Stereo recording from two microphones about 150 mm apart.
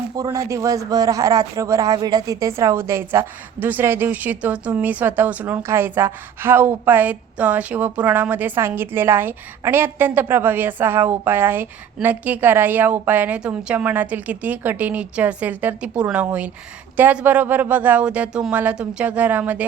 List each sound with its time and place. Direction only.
0.2 s a man's voice: 20° right (ahead or behind)